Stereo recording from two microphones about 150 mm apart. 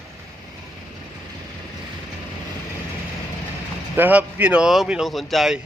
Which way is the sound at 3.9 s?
10° right (ahead or behind).